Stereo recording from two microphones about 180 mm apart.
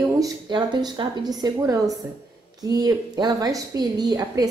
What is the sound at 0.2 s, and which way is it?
A woman's voice, 25° right (ahead or behind).